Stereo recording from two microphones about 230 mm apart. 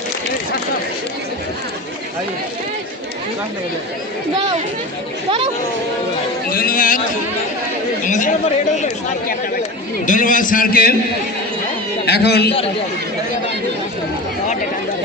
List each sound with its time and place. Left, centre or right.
6.5 s speech: left
8.0 s speech: left
12.0 s a man's voice: left